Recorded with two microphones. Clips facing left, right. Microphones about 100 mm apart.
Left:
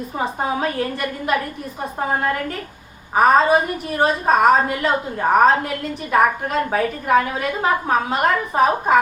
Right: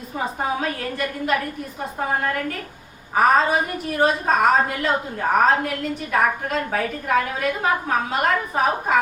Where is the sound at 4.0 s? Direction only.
20° left (ahead or behind).